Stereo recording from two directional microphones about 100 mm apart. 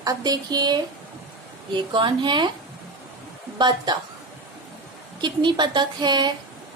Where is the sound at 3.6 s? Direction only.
45° right (ahead or behind).